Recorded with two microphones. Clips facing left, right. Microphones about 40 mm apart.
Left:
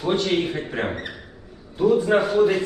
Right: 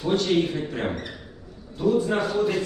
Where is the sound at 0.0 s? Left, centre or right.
Left.